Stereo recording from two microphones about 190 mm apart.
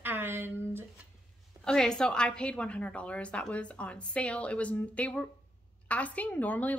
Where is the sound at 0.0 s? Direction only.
10° right (ahead or behind).